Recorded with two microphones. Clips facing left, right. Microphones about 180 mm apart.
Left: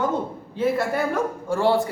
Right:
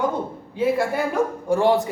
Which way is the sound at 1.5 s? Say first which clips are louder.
Right 2 dB; 15° right (ahead or behind).